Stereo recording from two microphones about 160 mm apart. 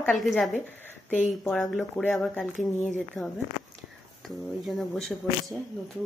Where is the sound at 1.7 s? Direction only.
5° left (ahead or behind).